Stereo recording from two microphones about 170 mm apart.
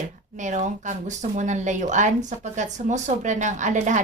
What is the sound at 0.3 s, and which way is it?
Speech, 45° right (ahead or behind).